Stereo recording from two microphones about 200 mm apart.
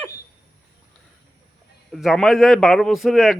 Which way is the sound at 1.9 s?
Centre (ahead or behind).